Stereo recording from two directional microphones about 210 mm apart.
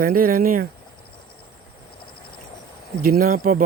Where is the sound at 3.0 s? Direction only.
45° right (ahead or behind).